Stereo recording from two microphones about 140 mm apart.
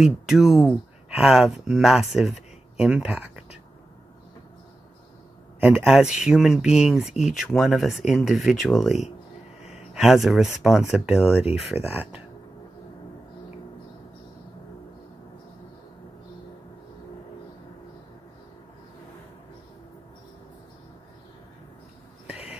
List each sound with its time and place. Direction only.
0.0 s speech: centre (ahead or behind)
5.6 s speech: 5° right (ahead or behind)
22.3 s a sound: 10° right (ahead or behind)